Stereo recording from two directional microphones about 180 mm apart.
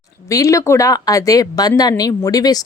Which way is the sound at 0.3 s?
20° left (ahead or behind).